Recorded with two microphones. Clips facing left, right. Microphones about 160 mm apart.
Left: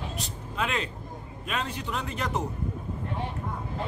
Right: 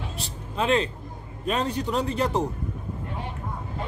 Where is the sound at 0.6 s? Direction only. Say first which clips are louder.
Right 7 dB; 30° right (ahead or behind).